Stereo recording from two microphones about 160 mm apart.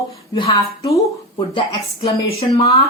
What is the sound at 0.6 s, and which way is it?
Speech, 20° left (ahead or behind).